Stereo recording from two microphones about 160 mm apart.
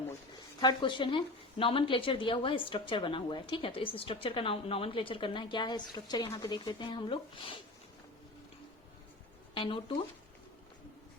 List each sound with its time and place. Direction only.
0.6 s a woman's voice: 30° left (ahead or behind)
9.6 s a woman's voice: 30° left (ahead or behind)